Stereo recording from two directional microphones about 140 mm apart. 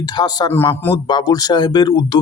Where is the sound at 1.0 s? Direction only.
30° left (ahead or behind).